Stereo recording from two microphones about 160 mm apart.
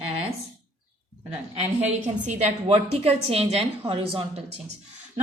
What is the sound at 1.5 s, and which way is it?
A woman's voice, 45° right (ahead or behind).